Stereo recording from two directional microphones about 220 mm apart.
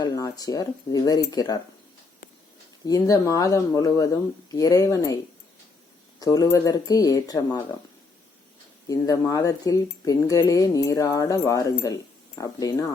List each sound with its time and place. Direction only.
0.0 s speech: 15° left (ahead or behind)
2.8 s speech: 15° left (ahead or behind)
6.1 s speech: 15° left (ahead or behind)
8.9 s speech: 15° left (ahead or behind)